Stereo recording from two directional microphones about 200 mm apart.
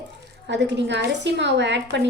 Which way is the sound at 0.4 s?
60° right (ahead or behind).